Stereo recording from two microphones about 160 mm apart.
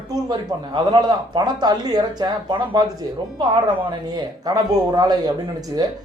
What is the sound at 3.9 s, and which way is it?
A man's voice, 25° right (ahead or behind).